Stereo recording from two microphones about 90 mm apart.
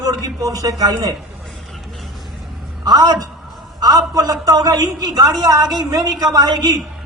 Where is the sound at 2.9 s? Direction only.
50° right (ahead or behind).